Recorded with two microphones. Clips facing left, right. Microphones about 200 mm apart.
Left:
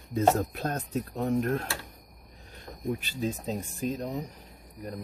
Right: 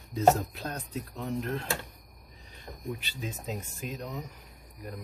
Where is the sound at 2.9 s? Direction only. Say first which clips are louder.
Left 7 dB; 45° left (ahead or behind).